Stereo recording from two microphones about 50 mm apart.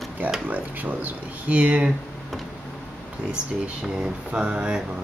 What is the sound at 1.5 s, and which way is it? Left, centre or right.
Speech, right.